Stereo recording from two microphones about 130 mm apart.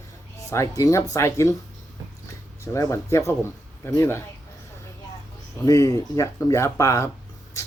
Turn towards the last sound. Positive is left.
turn(degrees=25)  # may be behind; listen again after turning